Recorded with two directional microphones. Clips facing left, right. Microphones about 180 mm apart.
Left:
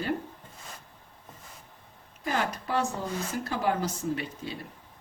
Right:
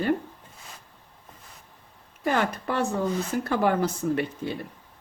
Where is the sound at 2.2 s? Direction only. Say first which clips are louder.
Right 5 dB; 55° right (ahead or behind).